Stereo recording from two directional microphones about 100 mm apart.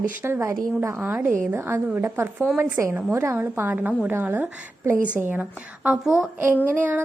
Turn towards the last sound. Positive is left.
turn(degrees=-20)  # may be behind; listen again after turning